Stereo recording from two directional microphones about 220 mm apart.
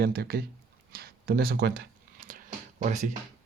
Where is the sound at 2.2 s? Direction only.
35° right (ahead or behind).